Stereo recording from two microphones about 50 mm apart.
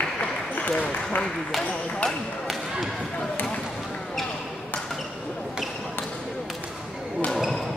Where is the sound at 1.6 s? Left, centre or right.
Left.